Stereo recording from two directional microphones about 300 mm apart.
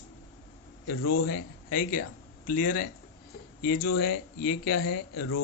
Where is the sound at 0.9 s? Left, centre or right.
Left.